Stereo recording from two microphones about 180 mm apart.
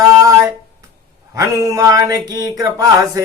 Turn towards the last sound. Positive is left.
turn(degrees=-20)  # may be behind; listen again after turning